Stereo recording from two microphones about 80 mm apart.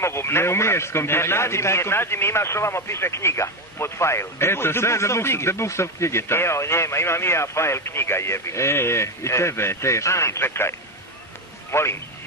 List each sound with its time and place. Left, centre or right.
0.0 s a man's voice: left